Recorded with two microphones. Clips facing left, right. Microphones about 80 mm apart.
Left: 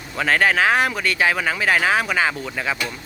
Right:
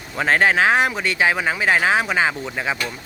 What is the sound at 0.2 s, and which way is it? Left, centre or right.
A man's voice, right.